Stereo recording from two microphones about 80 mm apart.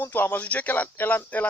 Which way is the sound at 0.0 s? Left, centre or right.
Left.